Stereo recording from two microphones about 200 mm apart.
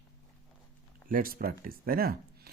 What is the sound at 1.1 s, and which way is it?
Speech, 45° right (ahead or behind).